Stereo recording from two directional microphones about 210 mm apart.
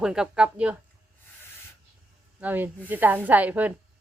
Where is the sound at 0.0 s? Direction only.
5° right (ahead or behind).